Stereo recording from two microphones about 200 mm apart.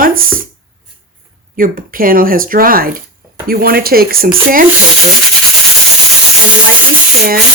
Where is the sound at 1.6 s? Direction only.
45° right (ahead or behind).